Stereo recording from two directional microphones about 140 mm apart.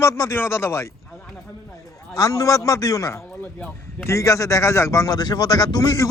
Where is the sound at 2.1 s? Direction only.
25° left (ahead or behind).